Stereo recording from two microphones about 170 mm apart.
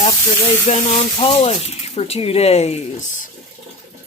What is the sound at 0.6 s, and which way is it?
Speech, 40° left (ahead or behind).